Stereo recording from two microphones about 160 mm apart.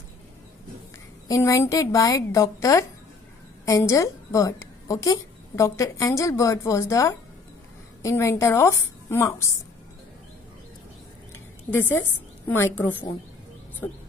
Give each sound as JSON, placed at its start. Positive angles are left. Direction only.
{"t": 1.3, "sound": "a woman's voice", "side_deg": 20}
{"t": 11.7, "sound": "a woman's voice", "side_deg": 15}